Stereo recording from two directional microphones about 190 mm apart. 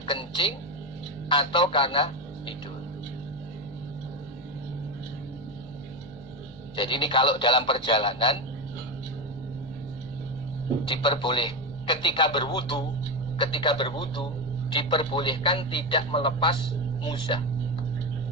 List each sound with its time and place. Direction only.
0.0 s music: 25° left (ahead or behind)
1.3 s speech: 25° left (ahead or behind)
6.7 s speech: 25° left (ahead or behind)
10.8 s speech: 25° left (ahead or behind)